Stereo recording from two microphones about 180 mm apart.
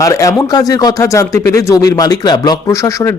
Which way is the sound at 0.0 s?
20° left (ahead or behind).